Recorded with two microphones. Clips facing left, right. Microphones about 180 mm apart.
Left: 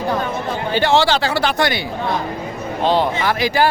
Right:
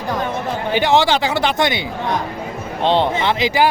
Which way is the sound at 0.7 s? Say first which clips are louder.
Even; 15° right (ahead or behind).